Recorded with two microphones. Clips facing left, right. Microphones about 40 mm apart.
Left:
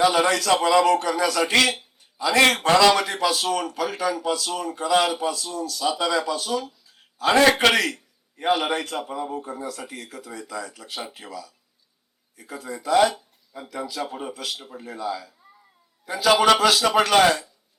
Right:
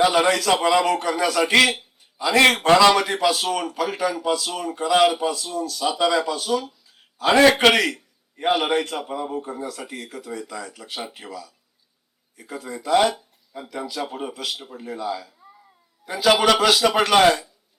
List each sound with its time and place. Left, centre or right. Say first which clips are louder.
0.0 s speech: right 1 dB; centre
2.3 s a man's voice: right 2 dB; centre
15.1 s cat: right 2 dB; centre
16.1 s speech: even; centre